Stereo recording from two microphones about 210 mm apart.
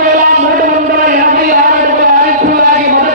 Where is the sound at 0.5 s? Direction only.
40° right (ahead or behind).